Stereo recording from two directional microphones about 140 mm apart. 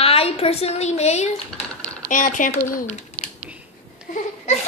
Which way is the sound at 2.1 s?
65° left (ahead or behind).